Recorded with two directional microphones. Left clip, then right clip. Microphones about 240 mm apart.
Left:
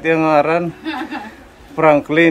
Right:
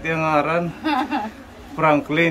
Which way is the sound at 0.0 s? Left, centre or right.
Left.